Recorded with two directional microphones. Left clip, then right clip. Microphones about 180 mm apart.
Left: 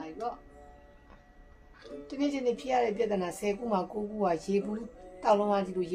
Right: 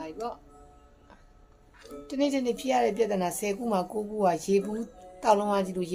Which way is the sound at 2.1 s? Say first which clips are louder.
Right 3 dB; 45° right (ahead or behind).